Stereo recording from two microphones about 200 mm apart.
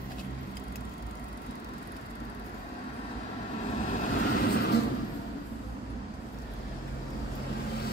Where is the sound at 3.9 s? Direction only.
45° left (ahead or behind).